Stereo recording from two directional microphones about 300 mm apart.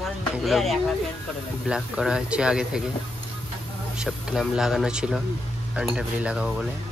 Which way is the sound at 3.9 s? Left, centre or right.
Centre.